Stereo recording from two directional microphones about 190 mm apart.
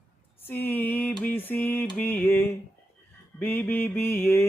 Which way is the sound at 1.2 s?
10° left (ahead or behind).